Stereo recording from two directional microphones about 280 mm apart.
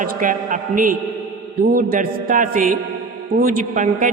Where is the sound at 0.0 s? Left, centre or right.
Right.